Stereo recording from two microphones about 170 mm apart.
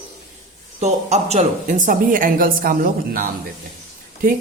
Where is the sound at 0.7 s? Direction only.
40° right (ahead or behind).